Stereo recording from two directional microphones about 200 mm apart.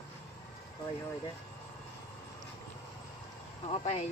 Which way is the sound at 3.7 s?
35° left (ahead or behind).